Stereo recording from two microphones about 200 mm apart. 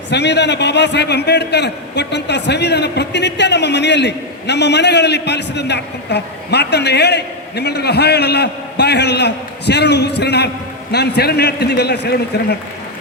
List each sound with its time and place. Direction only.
0.1 s a man's voice: 60° left (ahead or behind)